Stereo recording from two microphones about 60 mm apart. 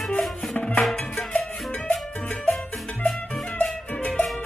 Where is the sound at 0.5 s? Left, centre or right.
Centre.